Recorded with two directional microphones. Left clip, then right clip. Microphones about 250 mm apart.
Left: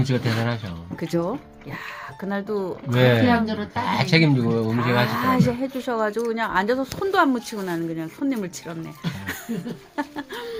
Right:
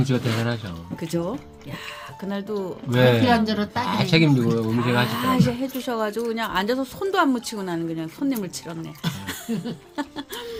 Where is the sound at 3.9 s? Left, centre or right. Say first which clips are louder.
Left 1 dB; left.